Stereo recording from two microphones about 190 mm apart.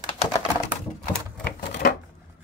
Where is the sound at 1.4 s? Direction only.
50° left (ahead or behind).